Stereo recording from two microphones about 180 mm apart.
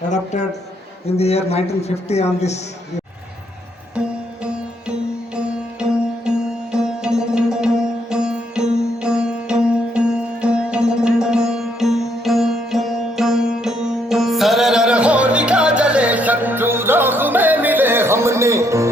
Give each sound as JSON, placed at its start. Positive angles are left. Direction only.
{"t": 1.0, "sound": "a man's voice", "side_deg": 35}
{"t": 4.4, "sound": "music", "side_deg": -5}